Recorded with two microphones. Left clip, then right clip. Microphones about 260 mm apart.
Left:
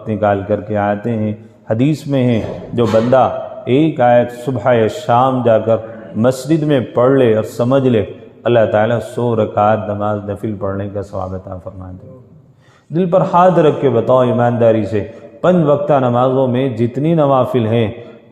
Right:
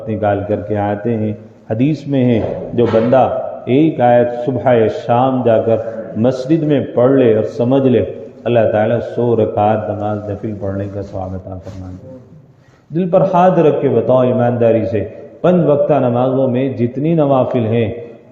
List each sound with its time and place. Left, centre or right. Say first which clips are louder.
0.1 s a man's voice: left 1 dB; left
12.9 s a man's voice: even; left